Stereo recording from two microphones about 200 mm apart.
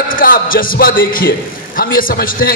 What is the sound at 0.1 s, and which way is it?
A man's voice, 45° left (ahead or behind).